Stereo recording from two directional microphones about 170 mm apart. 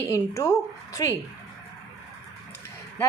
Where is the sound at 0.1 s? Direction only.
15° left (ahead or behind).